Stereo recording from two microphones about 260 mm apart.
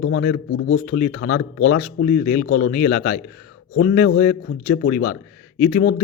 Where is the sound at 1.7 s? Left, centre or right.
Left.